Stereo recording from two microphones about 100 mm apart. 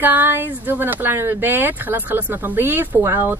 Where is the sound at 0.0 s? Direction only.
20° right (ahead or behind).